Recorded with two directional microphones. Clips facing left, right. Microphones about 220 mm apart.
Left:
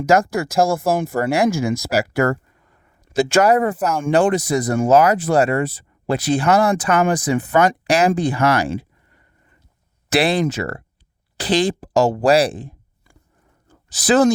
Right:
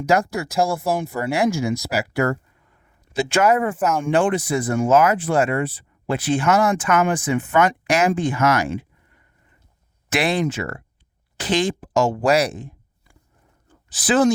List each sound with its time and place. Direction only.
0.0 s speech: 45° left (ahead or behind)
3.8 s speech: 5° right (ahead or behind)
4.0 s speech: 40° left (ahead or behind)